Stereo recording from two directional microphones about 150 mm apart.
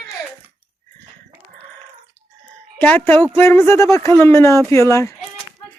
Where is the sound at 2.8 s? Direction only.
10° left (ahead or behind).